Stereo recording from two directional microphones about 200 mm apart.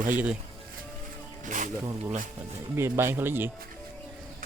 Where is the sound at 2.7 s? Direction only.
10° right (ahead or behind).